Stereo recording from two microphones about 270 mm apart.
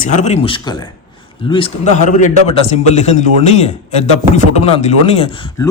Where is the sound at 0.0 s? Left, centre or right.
Left.